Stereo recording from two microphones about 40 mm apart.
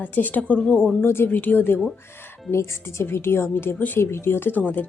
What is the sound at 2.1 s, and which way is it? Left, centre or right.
Speech, left.